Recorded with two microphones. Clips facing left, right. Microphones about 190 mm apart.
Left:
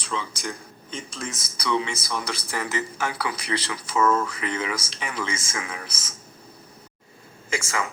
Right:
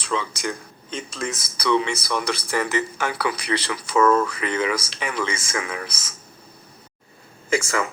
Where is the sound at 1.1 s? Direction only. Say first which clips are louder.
Right 5 dB; 65° right (ahead or behind).